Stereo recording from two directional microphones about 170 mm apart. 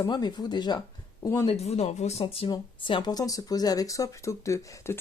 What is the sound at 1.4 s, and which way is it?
Speech, 40° left (ahead or behind).